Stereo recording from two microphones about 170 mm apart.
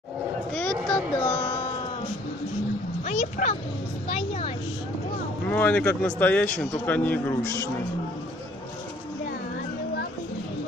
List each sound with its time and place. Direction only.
0.5 s a sound: 5° left (ahead or behind)
3.1 s a child's voice: 40° left (ahead or behind)
5.5 s speech: 10° left (ahead or behind)